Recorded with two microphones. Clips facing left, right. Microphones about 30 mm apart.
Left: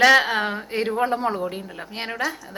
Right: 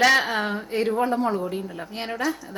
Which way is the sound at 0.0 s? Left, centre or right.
Centre.